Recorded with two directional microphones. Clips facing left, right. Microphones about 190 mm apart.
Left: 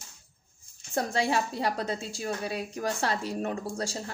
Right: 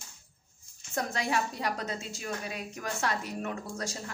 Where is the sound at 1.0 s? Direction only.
30° left (ahead or behind).